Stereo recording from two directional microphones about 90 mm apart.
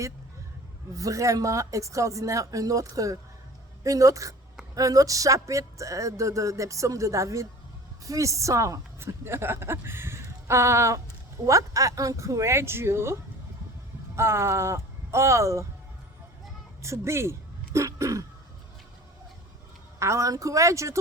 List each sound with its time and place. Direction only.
0.9 s a woman's voice: 40° right (ahead or behind)
14.2 s speech: 30° right (ahead or behind)
16.8 s speech: 30° right (ahead or behind)
20.0 s speech: 35° right (ahead or behind)